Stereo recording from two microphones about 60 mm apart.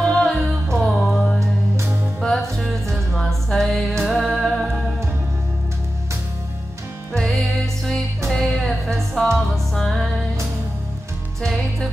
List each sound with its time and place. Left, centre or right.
0.1 s music: centre
2.3 s music: centre
7.1 s music: centre